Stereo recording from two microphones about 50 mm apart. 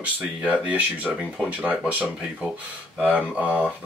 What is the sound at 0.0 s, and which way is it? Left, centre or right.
Speech, right.